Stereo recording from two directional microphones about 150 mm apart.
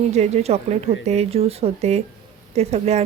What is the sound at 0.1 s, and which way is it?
Speech, 45° right (ahead or behind).